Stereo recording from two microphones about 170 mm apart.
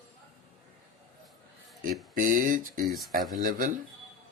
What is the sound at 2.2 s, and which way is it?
Speech, 50° right (ahead or behind).